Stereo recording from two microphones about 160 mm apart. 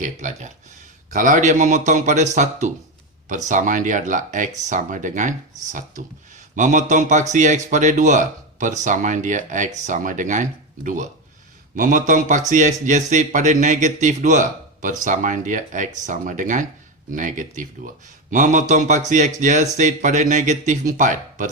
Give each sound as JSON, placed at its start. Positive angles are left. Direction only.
{"t": 0.0, "sound": "a man's voice", "side_deg": -50}